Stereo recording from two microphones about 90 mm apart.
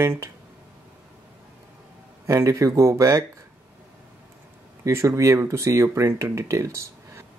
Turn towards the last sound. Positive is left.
turn(degrees=-35)  # may be behind; listen again after turning